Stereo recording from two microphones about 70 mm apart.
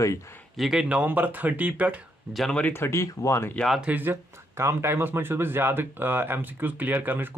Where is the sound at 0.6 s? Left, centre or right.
Centre.